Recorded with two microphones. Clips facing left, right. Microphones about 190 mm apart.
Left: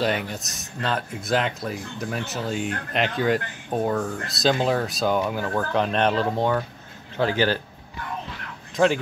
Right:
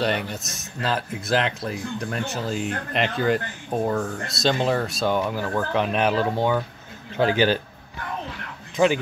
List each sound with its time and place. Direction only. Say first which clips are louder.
0.0 s speech: even; centre (ahead or behind)
7.2 s speech: right 2 dB; 15° right (ahead or behind)
8.7 s speech: even; centre (ahead or behind)